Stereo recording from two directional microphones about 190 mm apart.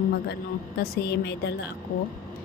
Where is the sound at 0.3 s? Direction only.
60° left (ahead or behind).